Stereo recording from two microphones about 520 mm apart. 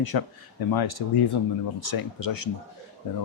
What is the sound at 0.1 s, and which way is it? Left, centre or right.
Speech, left.